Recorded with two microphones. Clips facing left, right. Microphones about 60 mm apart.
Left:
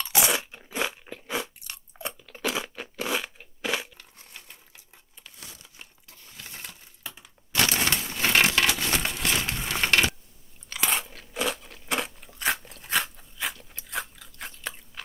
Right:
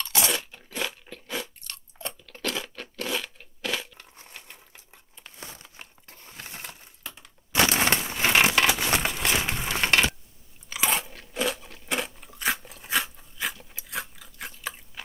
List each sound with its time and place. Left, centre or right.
0.0 s crunch: centre
5.2 s crumpling: right
6.5 s a sound: right
8.6 s crumpling: centre
9.7 s a sound: centre
10.7 s crunch: centre